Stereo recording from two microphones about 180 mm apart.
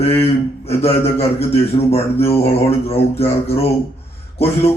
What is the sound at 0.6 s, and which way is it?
Speech, 35° left (ahead or behind).